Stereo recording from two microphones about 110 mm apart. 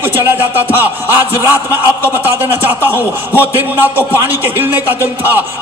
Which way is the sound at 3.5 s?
20° right (ahead or behind).